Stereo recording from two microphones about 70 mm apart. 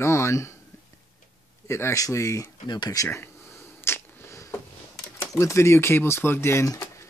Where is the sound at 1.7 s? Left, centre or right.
Left.